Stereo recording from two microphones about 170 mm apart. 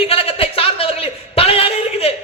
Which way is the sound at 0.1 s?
35° left (ahead or behind).